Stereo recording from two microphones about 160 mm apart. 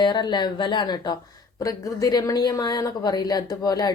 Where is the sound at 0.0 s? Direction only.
25° left (ahead or behind).